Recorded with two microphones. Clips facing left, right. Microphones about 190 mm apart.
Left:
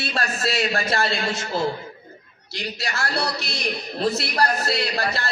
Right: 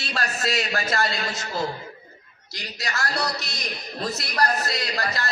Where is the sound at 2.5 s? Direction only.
30° left (ahead or behind).